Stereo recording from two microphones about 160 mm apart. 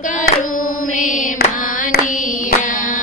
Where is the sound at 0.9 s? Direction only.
55° left (ahead or behind).